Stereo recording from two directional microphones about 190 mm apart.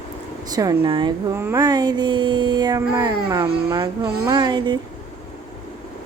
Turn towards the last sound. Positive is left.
turn(degrees=-25)  # may be behind; listen again after turning